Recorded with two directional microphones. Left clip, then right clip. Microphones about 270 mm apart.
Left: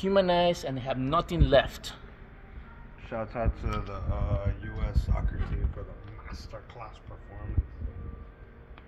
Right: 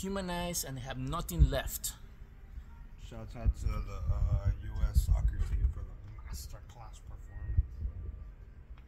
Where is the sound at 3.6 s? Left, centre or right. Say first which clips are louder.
Left 11 dB; right.